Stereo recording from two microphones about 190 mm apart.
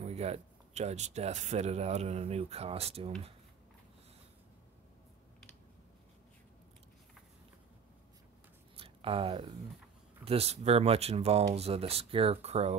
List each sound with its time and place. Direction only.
0.0 s speech: 35° right (ahead or behind)
8.7 s a sound: 30° right (ahead or behind)
10.2 s speech: 30° right (ahead or behind)